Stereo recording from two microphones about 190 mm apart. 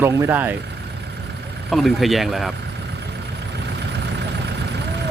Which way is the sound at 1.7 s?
Centre (ahead or behind).